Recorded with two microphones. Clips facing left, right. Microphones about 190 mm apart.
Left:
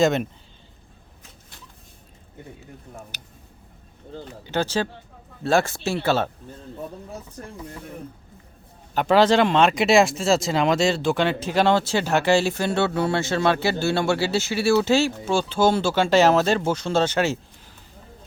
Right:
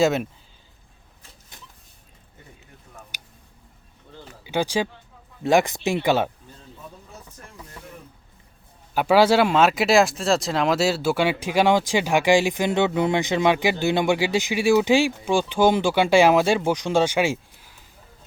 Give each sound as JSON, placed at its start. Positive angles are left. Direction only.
{"t": 0.0, "sound": "speech", "side_deg": -5}
{"t": 3.1, "sound": "a sound", "side_deg": -10}
{"t": 4.4, "sound": "speech", "side_deg": -10}
{"t": 9.0, "sound": "speech", "side_deg": -10}